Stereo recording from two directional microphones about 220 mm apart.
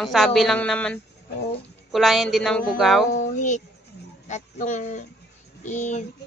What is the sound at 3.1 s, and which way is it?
Speech, 35° left (ahead or behind).